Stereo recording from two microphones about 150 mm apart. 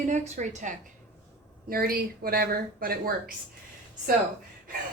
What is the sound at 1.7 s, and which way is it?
Speech, 80° right.